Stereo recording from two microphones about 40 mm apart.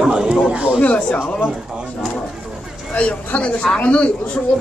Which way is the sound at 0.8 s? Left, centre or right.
Left.